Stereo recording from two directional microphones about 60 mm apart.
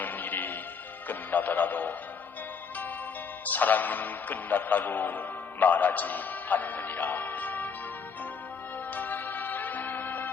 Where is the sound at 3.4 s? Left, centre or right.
Left.